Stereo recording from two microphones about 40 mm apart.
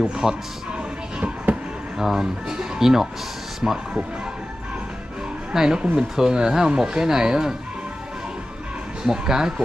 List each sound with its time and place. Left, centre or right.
0.0 s speech: centre
2.0 s speech: centre
5.5 s speech: centre
9.0 s speech: centre